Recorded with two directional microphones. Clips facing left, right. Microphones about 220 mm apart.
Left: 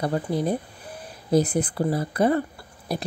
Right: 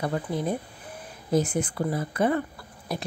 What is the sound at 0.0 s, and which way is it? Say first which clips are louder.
Speech: left 3 dB; 35° left (ahead or behind).